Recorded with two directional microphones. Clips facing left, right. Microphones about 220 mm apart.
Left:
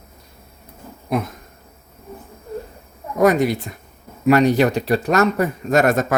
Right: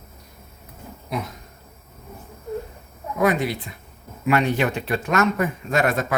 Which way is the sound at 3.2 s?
45° left (ahead or behind).